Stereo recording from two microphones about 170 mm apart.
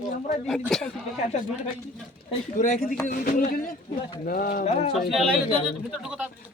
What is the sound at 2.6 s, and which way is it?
Speech, 50° left (ahead or behind).